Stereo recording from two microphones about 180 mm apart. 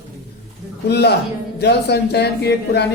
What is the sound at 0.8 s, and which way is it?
Speech, 65° left (ahead or behind).